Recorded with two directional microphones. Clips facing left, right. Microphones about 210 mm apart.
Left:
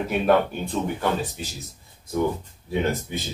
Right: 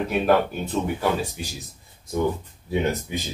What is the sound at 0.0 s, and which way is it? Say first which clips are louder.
Speech: even; centre (ahead or behind).